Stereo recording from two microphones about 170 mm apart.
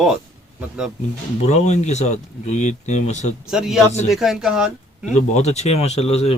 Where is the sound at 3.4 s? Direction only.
5° right (ahead or behind).